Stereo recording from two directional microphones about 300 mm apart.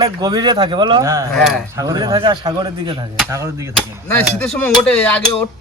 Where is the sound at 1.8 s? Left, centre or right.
Centre.